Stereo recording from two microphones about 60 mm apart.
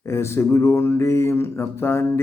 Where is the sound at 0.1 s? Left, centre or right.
Left.